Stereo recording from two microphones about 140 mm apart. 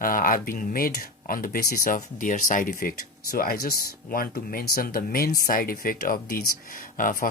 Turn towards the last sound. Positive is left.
turn(degrees=80)